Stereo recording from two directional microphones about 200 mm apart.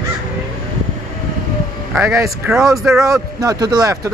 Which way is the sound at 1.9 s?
10° right (ahead or behind).